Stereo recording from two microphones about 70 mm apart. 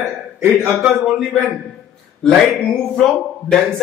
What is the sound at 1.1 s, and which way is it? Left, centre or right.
A man's voice, centre.